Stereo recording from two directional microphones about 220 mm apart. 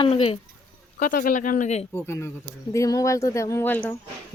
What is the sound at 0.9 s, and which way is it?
Speech, 40° left (ahead or behind).